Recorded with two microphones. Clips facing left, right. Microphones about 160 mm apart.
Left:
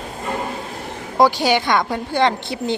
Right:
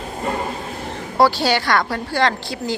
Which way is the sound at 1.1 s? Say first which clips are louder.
Left 1 dB; 15° left (ahead or behind).